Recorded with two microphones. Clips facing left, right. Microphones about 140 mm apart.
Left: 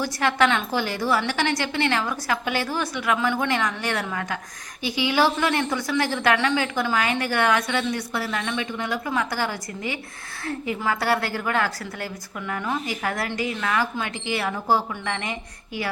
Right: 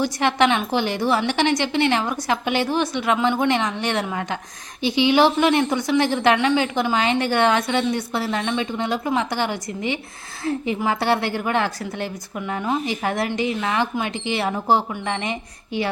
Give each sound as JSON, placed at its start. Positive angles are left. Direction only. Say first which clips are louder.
{"t": 0.0, "sound": "a woman's voice", "louder": "right 3 dB", "side_deg": -20}